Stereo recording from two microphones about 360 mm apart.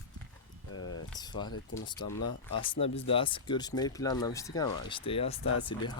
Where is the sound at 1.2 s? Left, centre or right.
Centre.